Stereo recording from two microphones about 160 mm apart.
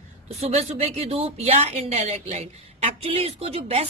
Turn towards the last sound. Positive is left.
turn(degrees=-40)  # may be behind; listen again after turning